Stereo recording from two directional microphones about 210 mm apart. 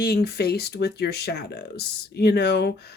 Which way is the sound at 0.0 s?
50° left (ahead or behind).